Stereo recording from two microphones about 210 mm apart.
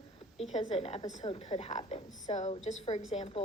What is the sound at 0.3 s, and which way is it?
A woman's voice, 30° left (ahead or behind).